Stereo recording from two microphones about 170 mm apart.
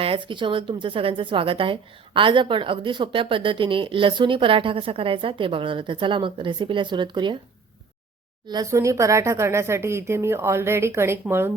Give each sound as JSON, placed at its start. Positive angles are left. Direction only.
{"t": 0.0, "sound": "speech", "side_deg": -30}
{"t": 8.4, "sound": "speech", "side_deg": -20}